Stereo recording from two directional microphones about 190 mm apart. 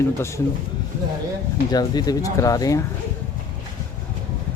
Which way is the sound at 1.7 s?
20° left (ahead or behind).